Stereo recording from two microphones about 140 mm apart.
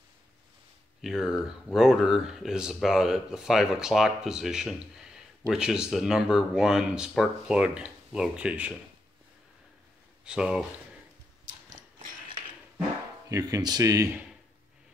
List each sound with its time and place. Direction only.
1.0 s speech: 5° right (ahead or behind)
10.2 s speech: 5° right (ahead or behind)
13.3 s speech: 25° right (ahead or behind)